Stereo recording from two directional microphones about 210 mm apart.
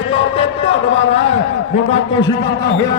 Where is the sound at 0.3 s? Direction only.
25° left (ahead or behind).